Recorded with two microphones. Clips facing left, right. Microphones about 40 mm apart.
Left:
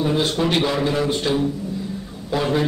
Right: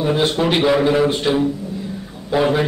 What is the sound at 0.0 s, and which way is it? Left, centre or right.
A man's voice, centre.